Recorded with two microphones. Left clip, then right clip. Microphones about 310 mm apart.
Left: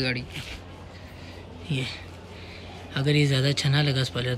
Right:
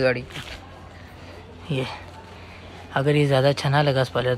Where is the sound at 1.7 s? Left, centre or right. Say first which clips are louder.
Right 4 dB; centre.